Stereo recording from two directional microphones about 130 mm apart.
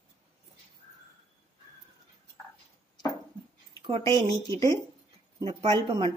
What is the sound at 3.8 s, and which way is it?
A woman's voice, 40° right (ahead or behind).